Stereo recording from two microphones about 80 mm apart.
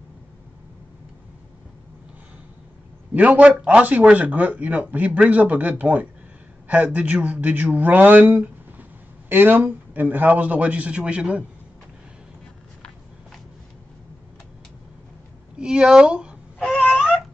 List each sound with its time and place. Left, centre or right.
3.2 s a man's voice: centre
15.5 s speech: centre
16.5 s a sound: centre